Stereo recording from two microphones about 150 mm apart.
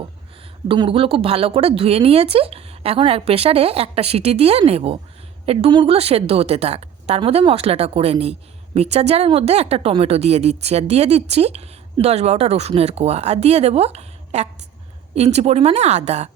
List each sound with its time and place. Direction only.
0.7 s a woman's voice: 35° right (ahead or behind)